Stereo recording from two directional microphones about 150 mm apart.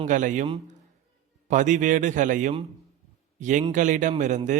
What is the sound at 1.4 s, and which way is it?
A man's voice, 55° right (ahead or behind).